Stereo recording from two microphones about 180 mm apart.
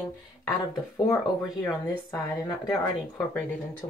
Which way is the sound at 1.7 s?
5° left (ahead or behind).